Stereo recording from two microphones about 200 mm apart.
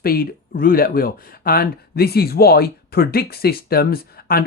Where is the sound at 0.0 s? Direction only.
50° left (ahead or behind).